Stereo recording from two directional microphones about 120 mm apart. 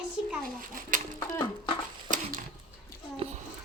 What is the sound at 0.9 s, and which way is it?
Speech, 90° right.